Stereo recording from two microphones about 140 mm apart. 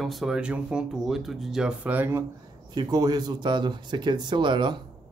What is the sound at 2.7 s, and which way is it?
Speech, 30° right (ahead or behind).